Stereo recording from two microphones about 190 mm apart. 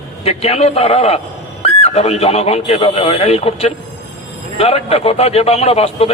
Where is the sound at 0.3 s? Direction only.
35° left (ahead or behind).